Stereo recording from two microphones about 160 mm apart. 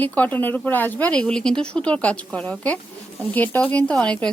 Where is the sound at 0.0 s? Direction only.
10° left (ahead or behind).